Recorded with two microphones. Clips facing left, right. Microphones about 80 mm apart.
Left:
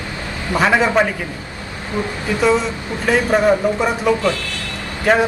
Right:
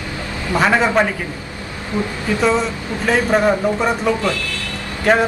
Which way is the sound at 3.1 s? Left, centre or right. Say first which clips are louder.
Left 1 dB; centre.